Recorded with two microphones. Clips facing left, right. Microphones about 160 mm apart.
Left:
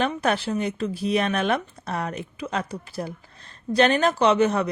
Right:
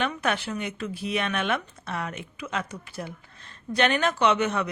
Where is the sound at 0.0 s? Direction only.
35° left (ahead or behind).